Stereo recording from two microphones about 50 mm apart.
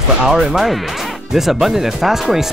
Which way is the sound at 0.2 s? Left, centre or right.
Centre.